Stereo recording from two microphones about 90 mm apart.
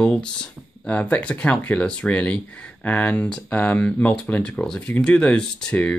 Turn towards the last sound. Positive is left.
turn(degrees=10)  # may be behind; listen again after turning